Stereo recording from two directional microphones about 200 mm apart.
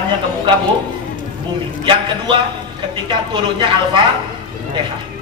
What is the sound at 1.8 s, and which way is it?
A man's voice, 25° right (ahead or behind).